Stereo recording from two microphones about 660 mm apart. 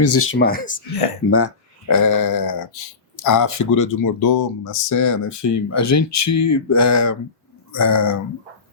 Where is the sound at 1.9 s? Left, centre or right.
Left.